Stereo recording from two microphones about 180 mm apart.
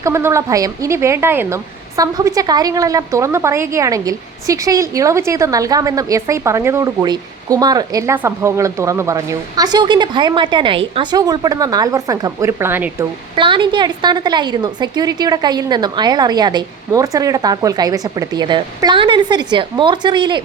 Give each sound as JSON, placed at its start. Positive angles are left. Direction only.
{"t": 0.0, "sound": "speech", "side_deg": -15}
{"t": 13.3, "sound": "speech", "side_deg": -25}